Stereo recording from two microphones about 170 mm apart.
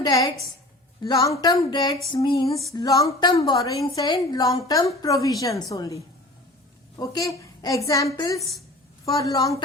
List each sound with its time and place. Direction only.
0.0 s a woman's voice: 20° left (ahead or behind)
8.4 s a woman's voice: centre (ahead or behind)
9.0 s a woman's voice: 20° left (ahead or behind)